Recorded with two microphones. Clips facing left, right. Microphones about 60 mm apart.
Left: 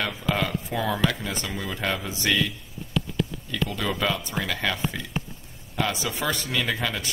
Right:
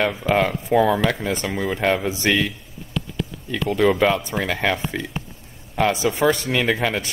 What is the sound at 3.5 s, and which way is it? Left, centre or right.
Speech, right.